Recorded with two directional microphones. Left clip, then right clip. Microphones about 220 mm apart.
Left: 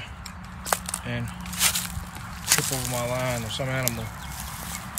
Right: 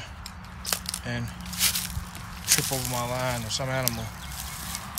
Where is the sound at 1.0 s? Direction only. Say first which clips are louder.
Left 1 dB; 5° right (ahead or behind).